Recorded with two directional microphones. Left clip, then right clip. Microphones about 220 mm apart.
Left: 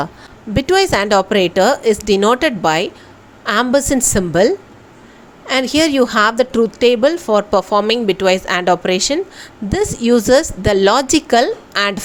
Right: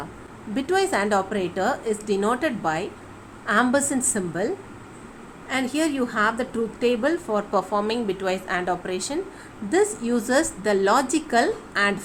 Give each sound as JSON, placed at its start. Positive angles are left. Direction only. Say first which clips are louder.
{"t": 0.5, "sound": "a woman's voice", "louder": "left 9 dB", "side_deg": 35}